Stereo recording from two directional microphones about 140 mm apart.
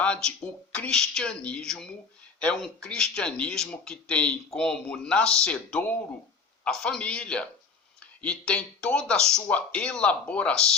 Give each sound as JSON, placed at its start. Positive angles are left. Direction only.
{"t": 0.0, "sound": "speech", "side_deg": 5}